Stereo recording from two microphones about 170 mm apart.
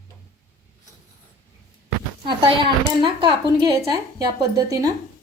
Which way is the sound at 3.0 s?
30° right (ahead or behind).